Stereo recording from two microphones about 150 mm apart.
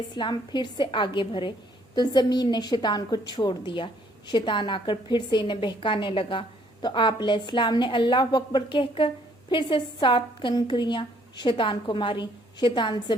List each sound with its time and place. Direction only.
0.2 s a woman's voice: 30° left (ahead or behind)